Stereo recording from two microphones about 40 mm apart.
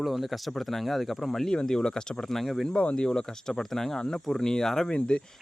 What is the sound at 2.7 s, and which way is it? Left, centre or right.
Speech, left.